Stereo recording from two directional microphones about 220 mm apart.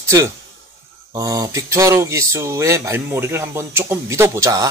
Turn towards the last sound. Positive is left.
turn(degrees=-15)  # may be behind; listen again after turning